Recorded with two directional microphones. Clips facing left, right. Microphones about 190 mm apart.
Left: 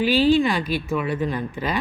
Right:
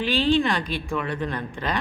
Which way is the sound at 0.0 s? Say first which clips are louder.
Left 4 dB; 5° left (ahead or behind).